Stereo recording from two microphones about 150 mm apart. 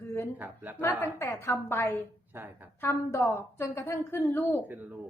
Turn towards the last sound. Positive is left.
turn(degrees=-10)  # may be behind; listen again after turning